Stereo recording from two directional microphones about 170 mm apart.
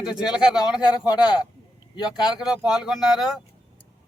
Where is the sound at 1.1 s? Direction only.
25° left (ahead or behind).